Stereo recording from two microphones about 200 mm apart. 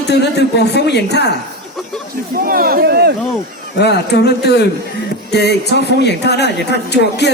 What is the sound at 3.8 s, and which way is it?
A woman's voice, 55° left (ahead or behind).